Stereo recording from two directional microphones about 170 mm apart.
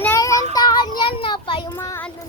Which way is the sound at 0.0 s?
15° left (ahead or behind).